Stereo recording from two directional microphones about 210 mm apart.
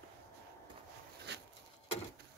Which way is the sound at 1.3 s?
55° right (ahead or behind).